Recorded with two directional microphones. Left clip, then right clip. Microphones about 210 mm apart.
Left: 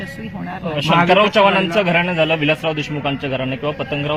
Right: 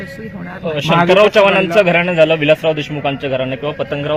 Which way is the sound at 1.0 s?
30° right (ahead or behind).